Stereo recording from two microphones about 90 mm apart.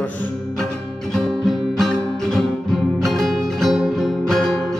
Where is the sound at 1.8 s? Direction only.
Centre (ahead or behind).